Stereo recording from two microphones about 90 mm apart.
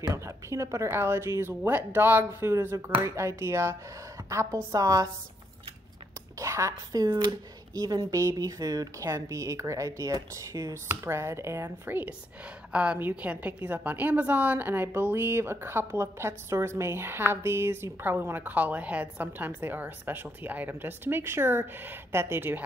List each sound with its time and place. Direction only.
0.0 s a woman's voice: 35° right (ahead or behind)
6.4 s a woman's voice: 35° right (ahead or behind)